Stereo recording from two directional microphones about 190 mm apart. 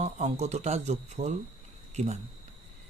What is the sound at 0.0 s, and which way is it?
Speech, 35° right (ahead or behind).